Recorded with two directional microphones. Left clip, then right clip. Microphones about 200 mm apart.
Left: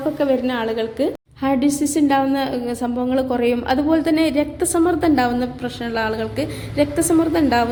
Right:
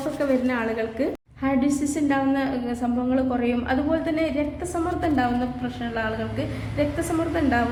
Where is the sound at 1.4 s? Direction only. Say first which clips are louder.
Left 5 dB; 30° left (ahead or behind).